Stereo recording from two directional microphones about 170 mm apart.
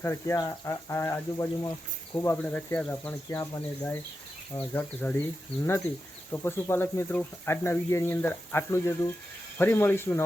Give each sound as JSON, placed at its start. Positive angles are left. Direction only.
{"t": 0.0, "sound": "speech", "side_deg": 15}
{"t": 6.3, "sound": "speech", "side_deg": 15}